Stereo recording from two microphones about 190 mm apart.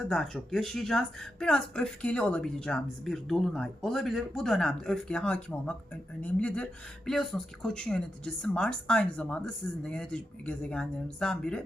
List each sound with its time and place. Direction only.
0.0 s speech: 5° left (ahead or behind)